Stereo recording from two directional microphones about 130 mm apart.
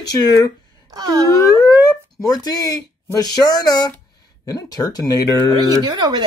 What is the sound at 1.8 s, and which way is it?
Speech, 30° left (ahead or behind).